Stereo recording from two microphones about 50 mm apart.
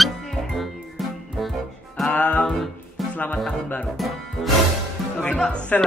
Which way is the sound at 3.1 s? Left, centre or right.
Left.